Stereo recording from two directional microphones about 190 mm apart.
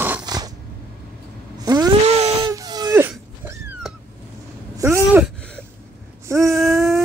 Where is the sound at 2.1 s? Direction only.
35° right (ahead or behind).